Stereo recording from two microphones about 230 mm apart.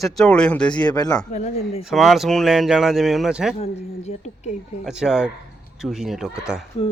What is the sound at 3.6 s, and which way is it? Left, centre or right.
Speech, left.